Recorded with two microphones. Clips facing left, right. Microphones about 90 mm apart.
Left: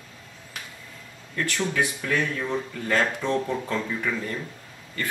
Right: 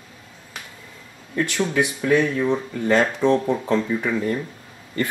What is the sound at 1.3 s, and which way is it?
Speech, 20° right (ahead or behind).